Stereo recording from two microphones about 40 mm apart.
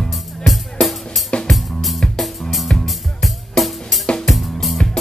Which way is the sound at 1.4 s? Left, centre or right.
Centre.